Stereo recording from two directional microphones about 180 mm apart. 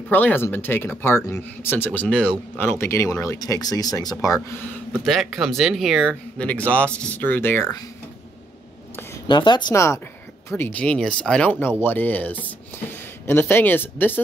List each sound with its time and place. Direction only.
0.1 s speech: 10° left (ahead or behind)
5.0 s speech: centre (ahead or behind)
9.3 s speech: 25° left (ahead or behind)